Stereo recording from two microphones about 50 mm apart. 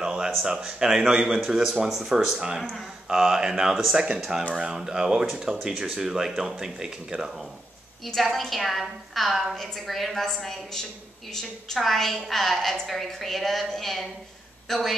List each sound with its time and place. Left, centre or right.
0.0 s a sound: centre
0.5 s speech: centre
8.1 s a woman's voice: centre